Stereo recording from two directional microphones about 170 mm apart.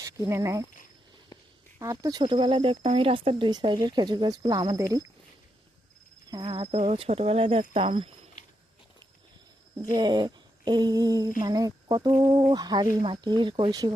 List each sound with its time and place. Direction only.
0.0 s speech: 20° right (ahead or behind)
1.8 s speech: 20° right (ahead or behind)
6.3 s speech: 30° right (ahead or behind)
9.8 s speech: 25° right (ahead or behind)